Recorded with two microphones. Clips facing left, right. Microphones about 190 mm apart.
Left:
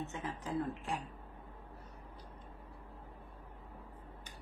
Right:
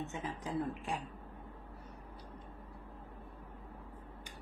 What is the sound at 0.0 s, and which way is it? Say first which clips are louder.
Speech: right 1 dB; 20° right (ahead or behind).